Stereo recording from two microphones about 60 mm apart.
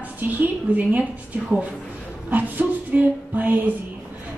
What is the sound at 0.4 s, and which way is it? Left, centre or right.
Speech, right.